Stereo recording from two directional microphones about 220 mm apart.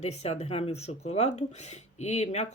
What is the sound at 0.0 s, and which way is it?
Speech, 30° left (ahead or behind).